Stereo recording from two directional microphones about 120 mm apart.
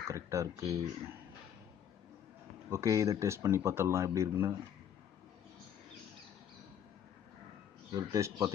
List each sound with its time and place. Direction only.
0.1 s speech: 25° right (ahead or behind)
2.7 s speech: 25° right (ahead or behind)
7.9 s speech: 25° right (ahead or behind)